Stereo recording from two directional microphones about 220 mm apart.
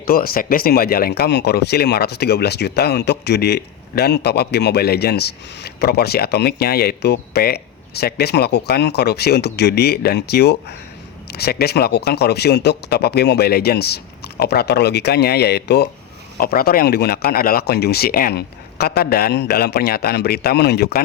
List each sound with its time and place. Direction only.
0.0 s speech: 40° left (ahead or behind)